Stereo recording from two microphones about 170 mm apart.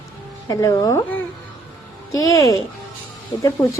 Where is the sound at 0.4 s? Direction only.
20° left (ahead or behind).